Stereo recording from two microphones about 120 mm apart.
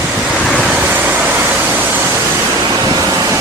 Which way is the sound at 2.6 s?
35° right (ahead or behind).